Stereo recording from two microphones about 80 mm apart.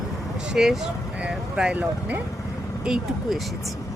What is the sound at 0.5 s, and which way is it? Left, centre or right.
Speech, centre.